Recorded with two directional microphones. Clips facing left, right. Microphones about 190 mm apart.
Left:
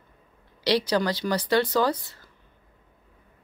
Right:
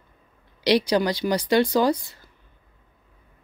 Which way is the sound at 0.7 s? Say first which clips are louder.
Right 3 dB; 15° right (ahead or behind).